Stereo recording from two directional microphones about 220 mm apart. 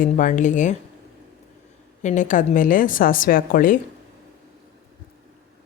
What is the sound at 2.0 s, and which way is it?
A woman's voice, 35° left (ahead or behind).